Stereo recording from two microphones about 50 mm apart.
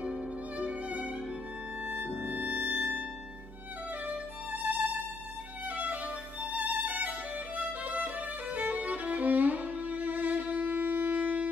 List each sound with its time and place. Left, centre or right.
0.0 s violin: right
2.2 s music: right
4.1 s music: right
6.4 s music: right